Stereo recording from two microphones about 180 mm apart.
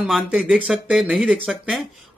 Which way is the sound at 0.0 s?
Centre (ahead or behind).